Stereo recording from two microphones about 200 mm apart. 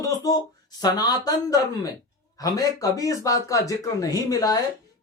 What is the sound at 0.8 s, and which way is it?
Speech, 20° left (ahead or behind).